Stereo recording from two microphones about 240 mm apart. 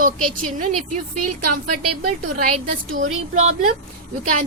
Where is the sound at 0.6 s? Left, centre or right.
Right.